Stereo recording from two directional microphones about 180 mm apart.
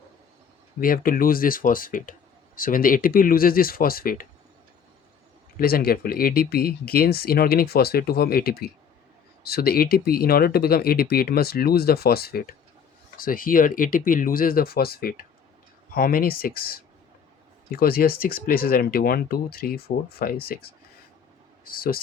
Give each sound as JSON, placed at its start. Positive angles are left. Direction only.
{"t": 0.8, "sound": "speech", "side_deg": 50}
{"t": 5.5, "sound": "speech", "side_deg": 55}